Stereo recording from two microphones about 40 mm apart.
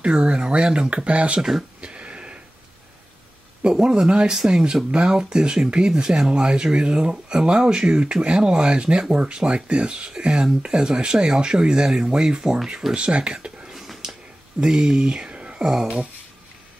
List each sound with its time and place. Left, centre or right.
0.0 s speech: right
1.8 s a sound: right
3.6 s speech: right
12.4 s speech: centre
12.9 s speech: right
14.6 s speech: centre
15.6 s speech: centre